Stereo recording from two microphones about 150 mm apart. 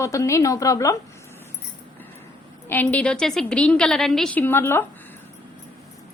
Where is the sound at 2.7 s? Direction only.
10° left (ahead or behind).